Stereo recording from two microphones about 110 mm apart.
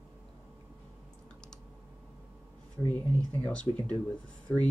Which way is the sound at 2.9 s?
15° left (ahead or behind).